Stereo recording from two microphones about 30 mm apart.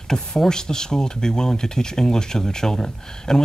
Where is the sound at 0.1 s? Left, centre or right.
Left.